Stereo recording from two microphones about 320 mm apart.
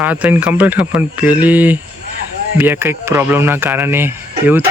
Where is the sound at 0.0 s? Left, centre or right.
Centre.